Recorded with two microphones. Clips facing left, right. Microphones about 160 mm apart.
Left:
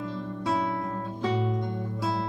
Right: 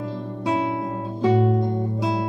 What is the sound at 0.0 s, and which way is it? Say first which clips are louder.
Music: right 4 dB; 30° right (ahead or behind).